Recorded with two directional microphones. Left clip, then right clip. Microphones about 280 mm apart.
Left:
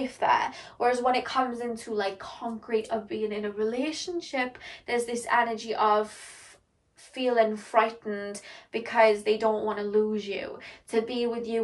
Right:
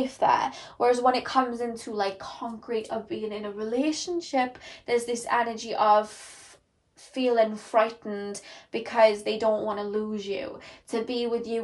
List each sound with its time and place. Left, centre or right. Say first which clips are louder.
0.0 s a woman's voice: right 2 dB; centre
7.2 s a woman's voice: right 1 dB; centre